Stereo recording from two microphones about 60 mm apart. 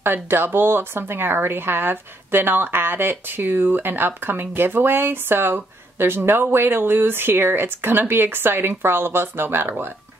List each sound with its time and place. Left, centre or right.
0.0 s a woman's voice: right